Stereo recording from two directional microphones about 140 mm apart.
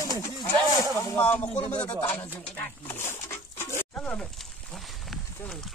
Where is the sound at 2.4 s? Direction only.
10° left (ahead or behind).